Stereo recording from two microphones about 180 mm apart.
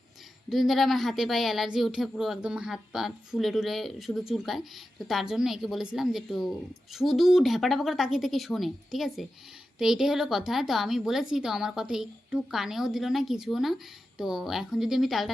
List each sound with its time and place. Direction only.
0.5 s a woman's voice: centre (ahead or behind)